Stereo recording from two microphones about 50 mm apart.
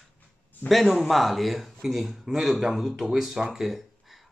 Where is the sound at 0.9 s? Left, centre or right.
Centre.